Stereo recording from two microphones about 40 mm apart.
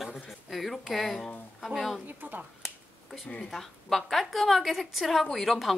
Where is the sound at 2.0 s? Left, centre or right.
Right.